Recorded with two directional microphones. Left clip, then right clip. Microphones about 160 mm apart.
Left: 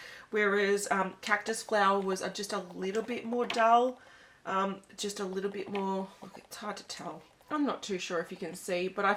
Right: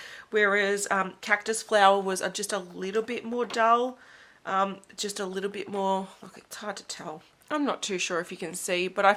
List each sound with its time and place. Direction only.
0.3 s speech: 25° right (ahead or behind)